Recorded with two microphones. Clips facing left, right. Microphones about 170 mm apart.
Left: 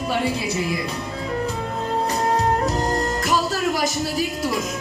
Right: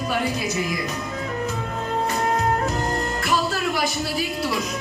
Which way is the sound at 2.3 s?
35° left (ahead or behind).